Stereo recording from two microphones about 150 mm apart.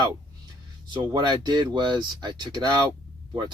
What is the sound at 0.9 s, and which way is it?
Speech, 30° right (ahead or behind).